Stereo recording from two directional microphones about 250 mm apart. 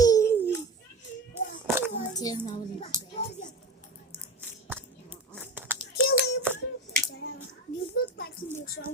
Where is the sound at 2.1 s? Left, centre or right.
Centre.